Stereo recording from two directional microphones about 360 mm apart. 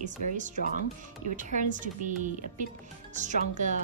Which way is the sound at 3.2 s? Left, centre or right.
Centre.